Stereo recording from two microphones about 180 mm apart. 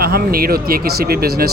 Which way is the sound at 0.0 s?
60° right (ahead or behind).